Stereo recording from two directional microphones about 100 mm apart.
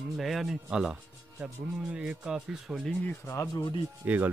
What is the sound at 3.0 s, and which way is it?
Speech, 20° left (ahead or behind).